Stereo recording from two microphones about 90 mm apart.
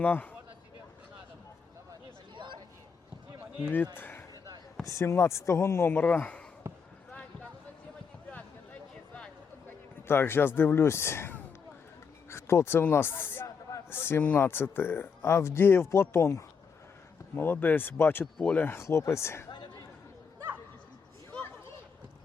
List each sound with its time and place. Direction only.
0.0 s speech: 20° left (ahead or behind)
2.3 s a sound: 60° right (ahead or behind)
3.9 s a sound: 20° left (ahead or behind)
4.9 s speech: 30° left (ahead or behind)
6.6 s basketball bounce: 30° right (ahead or behind)
9.6 s speech: 25° left (ahead or behind)